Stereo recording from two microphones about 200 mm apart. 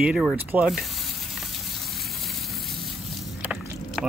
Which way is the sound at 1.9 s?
Centre (ahead or behind).